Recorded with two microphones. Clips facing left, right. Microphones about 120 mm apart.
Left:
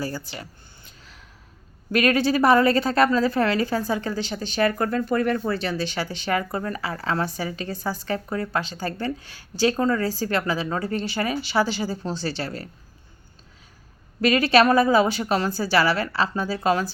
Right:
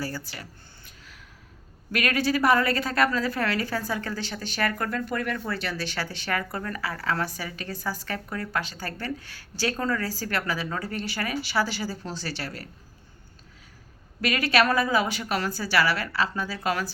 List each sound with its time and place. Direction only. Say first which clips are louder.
0.0 s a woman's voice: left 3 dB; 20° left (ahead or behind)
0.9 s gasp: left 2 dB; 30° left (ahead or behind)
1.9 s a woman's voice: left 5 dB; 25° left (ahead or behind)
14.2 s a woman's voice: left 6 dB; 25° left (ahead or behind)